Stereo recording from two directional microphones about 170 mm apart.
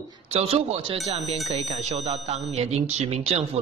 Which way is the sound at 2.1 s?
40° right (ahead or behind).